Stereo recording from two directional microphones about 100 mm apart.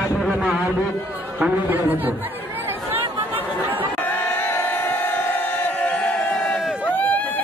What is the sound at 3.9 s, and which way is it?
Choir, 20° left (ahead or behind).